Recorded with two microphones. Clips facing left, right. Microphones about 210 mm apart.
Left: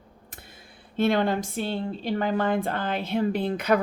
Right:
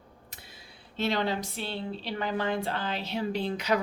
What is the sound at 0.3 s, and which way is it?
Speech, 50° left (ahead or behind).